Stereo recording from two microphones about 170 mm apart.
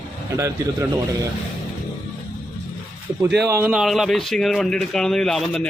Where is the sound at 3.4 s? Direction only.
15° right (ahead or behind).